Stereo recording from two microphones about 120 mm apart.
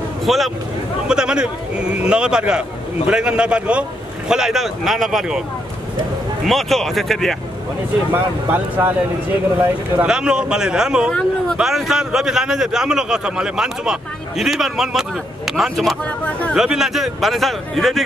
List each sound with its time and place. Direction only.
0.2 s a man's voice: centre (ahead or behind)
6.4 s a man's voice: centre (ahead or behind)
8.1 s speech: 15° right (ahead or behind)
10.0 s speech: 5° right (ahead or behind)
11.1 s a man's voice: 5° left (ahead or behind)
16.3 s speech: 10° left (ahead or behind)
16.5 s a man's voice: 5° right (ahead or behind)